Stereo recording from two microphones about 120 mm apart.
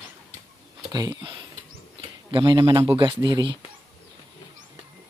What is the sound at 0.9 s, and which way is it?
Speech, 30° right (ahead or behind).